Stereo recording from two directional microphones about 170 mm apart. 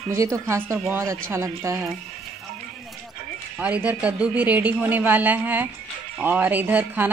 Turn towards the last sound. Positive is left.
turn(degrees=-10)  # may be behind; listen again after turning